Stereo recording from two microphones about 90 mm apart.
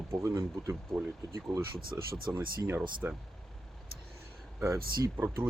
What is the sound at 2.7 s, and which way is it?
Speech, 20° right (ahead or behind).